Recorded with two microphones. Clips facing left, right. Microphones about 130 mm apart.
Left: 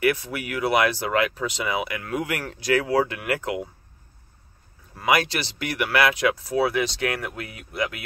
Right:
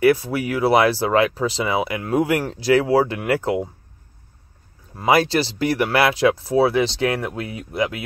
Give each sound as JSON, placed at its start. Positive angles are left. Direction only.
{"t": 0.0, "sound": "speech", "side_deg": -35}
{"t": 4.9, "sound": "speech", "side_deg": -30}